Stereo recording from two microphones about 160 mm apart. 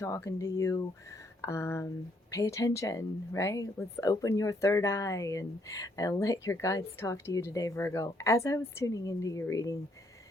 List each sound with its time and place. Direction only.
0.0 s speech: 20° left (ahead or behind)